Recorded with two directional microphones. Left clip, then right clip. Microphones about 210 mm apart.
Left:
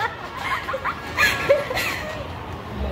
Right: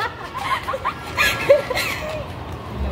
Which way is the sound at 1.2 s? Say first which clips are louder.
Right 3 dB; 20° right (ahead or behind).